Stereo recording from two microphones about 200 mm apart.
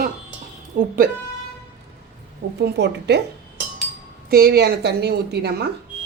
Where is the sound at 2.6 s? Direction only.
60° right (ahead or behind).